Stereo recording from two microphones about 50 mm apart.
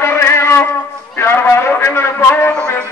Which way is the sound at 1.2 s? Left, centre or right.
Left.